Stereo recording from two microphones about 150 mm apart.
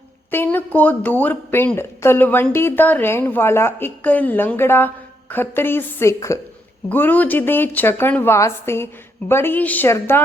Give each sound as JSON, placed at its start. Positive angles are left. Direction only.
{"t": 0.3, "sound": "speech", "side_deg": 15}